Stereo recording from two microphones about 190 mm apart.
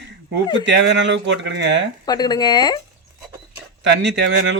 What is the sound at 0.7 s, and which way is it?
A man's voice, 70° right (ahead or behind).